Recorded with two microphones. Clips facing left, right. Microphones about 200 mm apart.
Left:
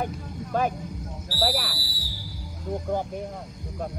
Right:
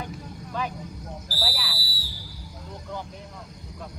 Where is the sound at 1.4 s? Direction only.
55° left (ahead or behind).